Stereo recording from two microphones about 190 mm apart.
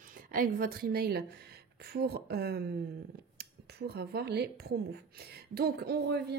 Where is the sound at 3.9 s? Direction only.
55° right (ahead or behind).